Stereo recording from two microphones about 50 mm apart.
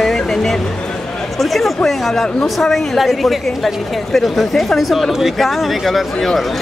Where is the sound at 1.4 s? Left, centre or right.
Centre.